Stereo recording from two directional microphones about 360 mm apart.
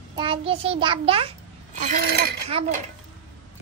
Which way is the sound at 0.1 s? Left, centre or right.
Centre.